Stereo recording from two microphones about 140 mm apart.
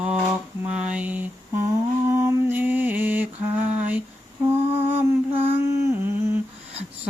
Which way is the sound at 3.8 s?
10° right (ahead or behind).